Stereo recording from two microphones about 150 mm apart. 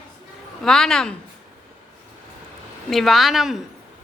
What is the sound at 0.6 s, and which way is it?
Speech, 5° left (ahead or behind).